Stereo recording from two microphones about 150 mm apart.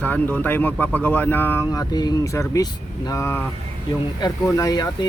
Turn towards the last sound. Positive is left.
turn(degrees=25)  # may be behind; listen again after turning